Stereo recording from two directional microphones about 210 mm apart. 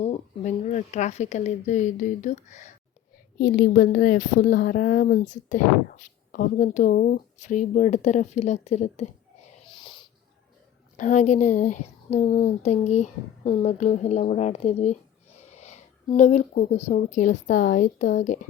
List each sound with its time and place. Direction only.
0.0 s a woman's voice: 30° left (ahead or behind)
9.6 s wheeze: 25° left (ahead or behind)
10.9 s a woman's voice: 35° left (ahead or behind)